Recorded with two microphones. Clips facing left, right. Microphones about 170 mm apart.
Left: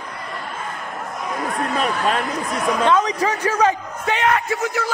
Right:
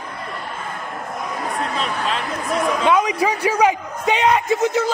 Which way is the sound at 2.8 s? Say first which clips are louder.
Left 1 dB; 10° right (ahead or behind).